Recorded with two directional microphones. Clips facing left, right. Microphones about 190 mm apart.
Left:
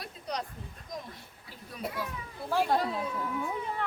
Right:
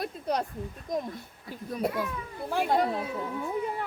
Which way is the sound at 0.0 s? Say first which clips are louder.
Right 7 dB; 50° right (ahead or behind).